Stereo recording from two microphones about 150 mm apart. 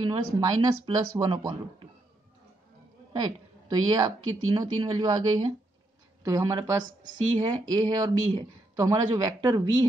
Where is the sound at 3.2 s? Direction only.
30° right (ahead or behind).